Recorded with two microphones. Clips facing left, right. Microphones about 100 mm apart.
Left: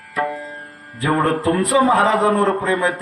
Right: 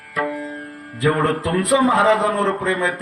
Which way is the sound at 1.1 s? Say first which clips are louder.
Left 2 dB; 20° left (ahead or behind).